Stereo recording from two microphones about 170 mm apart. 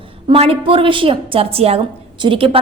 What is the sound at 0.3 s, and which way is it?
A woman's voice, 35° right (ahead or behind).